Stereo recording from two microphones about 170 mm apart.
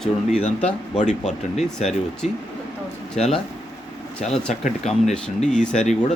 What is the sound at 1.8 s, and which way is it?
Speech, centre (ahead or behind).